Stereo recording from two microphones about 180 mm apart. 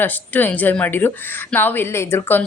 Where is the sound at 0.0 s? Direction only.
10° left (ahead or behind).